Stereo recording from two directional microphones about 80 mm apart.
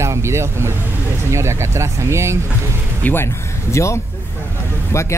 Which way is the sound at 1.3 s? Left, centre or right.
Right.